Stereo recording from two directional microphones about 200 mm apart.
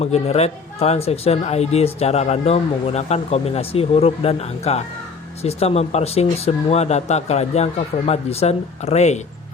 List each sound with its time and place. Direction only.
0.0 s speech: 30° left (ahead or behind)